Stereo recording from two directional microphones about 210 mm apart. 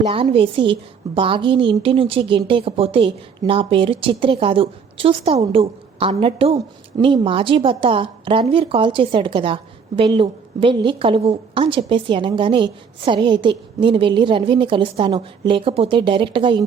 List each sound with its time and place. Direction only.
0.1 s a woman's voice: 25° right (ahead or behind)